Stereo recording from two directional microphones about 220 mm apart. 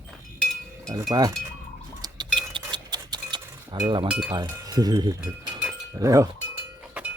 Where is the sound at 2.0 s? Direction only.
20° right (ahead or behind).